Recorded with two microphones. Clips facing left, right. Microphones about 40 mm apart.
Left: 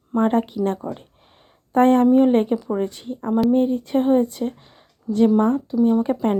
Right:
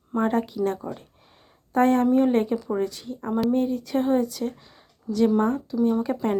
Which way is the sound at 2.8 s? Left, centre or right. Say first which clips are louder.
Left 3 dB; left.